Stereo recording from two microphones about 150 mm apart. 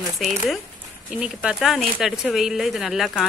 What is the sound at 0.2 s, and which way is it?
Speech, centre (ahead or behind).